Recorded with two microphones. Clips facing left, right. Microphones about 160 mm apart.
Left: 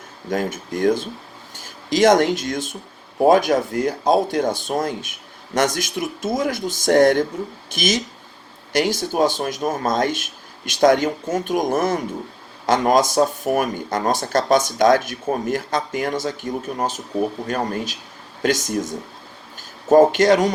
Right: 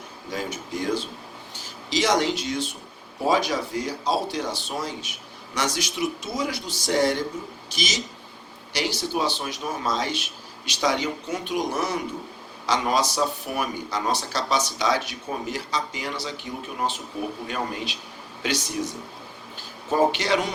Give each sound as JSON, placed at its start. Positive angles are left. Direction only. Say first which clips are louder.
{"t": 0.3, "sound": "speech", "louder": "left 7 dB", "side_deg": 50}